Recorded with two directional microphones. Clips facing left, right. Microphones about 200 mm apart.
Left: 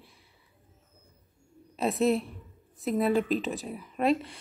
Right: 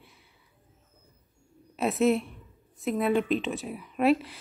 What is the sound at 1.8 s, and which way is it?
A woman's voice, centre (ahead or behind).